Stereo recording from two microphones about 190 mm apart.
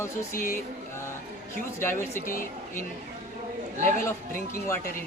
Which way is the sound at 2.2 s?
45° left (ahead or behind).